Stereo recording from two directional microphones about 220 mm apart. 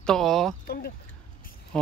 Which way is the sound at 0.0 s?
Centre (ahead or behind).